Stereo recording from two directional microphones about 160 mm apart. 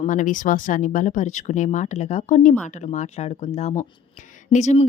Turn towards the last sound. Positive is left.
turn(degrees=45)  # may be behind; listen again after turning